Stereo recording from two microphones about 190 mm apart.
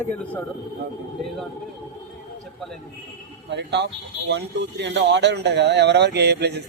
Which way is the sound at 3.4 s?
65° right (ahead or behind).